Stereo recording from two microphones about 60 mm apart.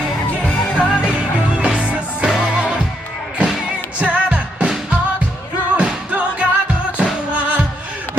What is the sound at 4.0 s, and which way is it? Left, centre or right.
Music, right.